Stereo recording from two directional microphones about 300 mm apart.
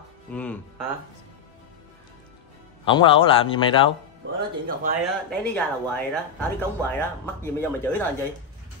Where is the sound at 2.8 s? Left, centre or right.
Centre.